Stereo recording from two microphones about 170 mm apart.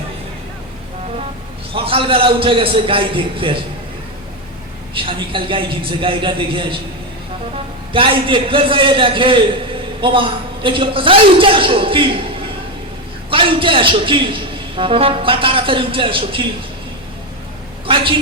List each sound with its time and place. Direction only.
1.7 s a man's voice: 30° right (ahead or behind)
4.9 s a man's voice: 30° right (ahead or behind)
7.9 s a man's voice: 30° right (ahead or behind)
17.8 s a woman's voice: 30° right (ahead or behind)